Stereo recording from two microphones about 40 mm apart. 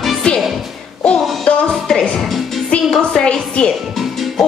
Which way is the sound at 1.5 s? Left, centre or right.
Left.